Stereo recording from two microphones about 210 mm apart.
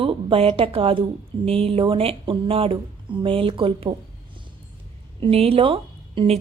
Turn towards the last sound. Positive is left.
turn(degrees=-25)  # may be behind; listen again after turning